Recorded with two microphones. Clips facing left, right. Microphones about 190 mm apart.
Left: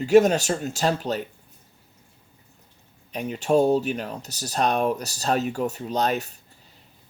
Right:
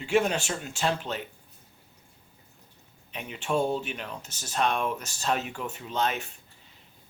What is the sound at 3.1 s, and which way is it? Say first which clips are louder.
Speech: left 8 dB; 40° left (ahead or behind).